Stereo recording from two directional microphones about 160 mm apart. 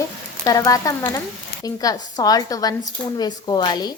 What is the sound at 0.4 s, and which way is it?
Speech, 20° left (ahead or behind).